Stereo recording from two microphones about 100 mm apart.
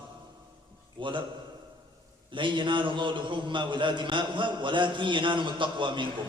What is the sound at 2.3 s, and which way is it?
A man's voice, 55° right (ahead or behind).